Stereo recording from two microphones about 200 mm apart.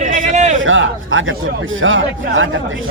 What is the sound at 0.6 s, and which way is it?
Speech, 75° right (ahead or behind).